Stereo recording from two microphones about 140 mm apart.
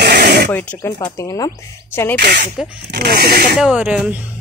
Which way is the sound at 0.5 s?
15° left (ahead or behind).